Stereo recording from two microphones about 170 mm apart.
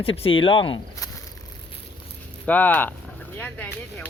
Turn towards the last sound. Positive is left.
turn(degrees=10)  # may be behind; listen again after turning